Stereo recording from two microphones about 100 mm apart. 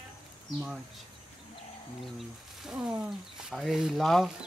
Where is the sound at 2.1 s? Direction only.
5° right (ahead or behind).